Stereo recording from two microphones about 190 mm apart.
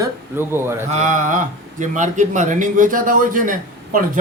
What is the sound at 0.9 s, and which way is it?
Speech, 40° right (ahead or behind).